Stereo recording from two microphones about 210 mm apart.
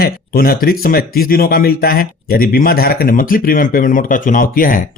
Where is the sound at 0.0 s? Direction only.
45° left (ahead or behind).